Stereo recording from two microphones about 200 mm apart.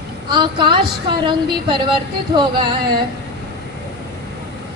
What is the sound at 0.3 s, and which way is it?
Speech, 25° right (ahead or behind).